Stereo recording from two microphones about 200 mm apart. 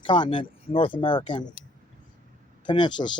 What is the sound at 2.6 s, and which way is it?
Speech, 25° left (ahead or behind).